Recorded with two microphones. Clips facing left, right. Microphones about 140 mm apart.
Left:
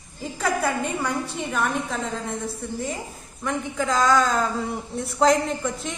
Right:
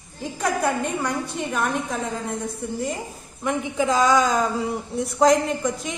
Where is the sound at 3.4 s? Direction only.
15° right (ahead or behind).